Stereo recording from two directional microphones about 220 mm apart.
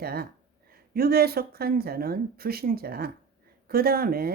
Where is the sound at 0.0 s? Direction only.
45° right (ahead or behind).